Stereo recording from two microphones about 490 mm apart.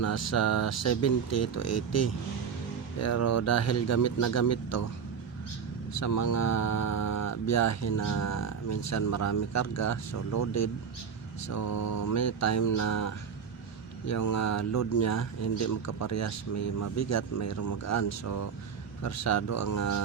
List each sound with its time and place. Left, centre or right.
0.0 s speech: left
5.9 s speech: left